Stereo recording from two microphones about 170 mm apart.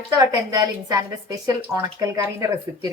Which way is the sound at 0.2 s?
25° right (ahead or behind).